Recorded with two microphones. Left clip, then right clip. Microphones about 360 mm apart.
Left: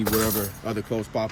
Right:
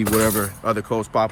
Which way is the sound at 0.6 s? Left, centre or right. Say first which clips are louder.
Right 9 dB; centre.